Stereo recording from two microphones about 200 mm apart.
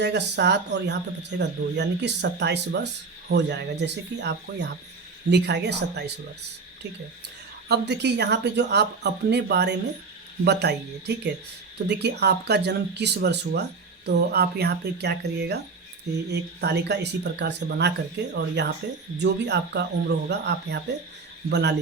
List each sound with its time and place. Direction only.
0.0 s speech: 60° right (ahead or behind)
7.7 s speech: 55° right (ahead or behind)